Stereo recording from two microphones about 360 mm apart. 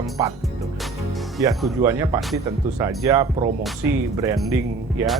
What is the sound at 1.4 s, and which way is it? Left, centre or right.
Speech, centre.